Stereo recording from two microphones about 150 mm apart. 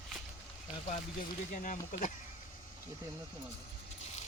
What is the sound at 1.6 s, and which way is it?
Speech, 55° left (ahead or behind).